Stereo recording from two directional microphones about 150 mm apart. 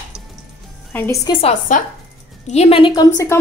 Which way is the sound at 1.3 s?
40° left (ahead or behind).